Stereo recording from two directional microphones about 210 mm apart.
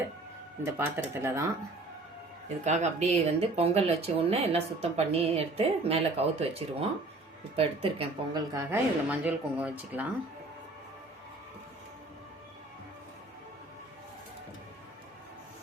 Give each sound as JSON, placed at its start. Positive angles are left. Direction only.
{"t": 0.6, "sound": "speech", "side_deg": -10}
{"t": 2.6, "sound": "speech", "side_deg": -35}